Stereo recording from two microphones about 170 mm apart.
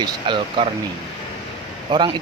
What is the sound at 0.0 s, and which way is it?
Speech, 30° right (ahead or behind).